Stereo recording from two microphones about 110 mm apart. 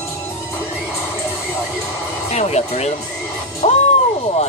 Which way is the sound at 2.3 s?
80° left.